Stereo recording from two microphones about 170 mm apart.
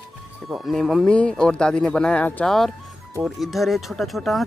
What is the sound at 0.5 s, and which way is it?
Speech, centre (ahead or behind).